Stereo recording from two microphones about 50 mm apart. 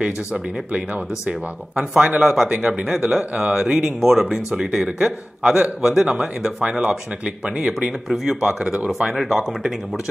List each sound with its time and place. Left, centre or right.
0.0 s speech: right
8.1 s speech: centre
9.1 s speech: centre